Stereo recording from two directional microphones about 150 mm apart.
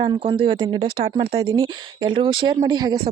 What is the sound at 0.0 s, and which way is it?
Speech, 35° right (ahead or behind).